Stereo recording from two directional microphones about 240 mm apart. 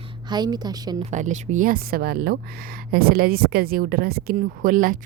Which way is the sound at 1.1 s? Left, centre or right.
Right.